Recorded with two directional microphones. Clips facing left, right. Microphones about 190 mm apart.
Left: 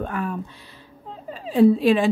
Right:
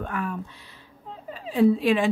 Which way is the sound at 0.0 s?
35° left (ahead or behind).